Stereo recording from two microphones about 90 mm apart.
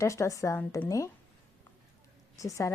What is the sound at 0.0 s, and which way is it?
A woman's voice, 35° left (ahead or behind).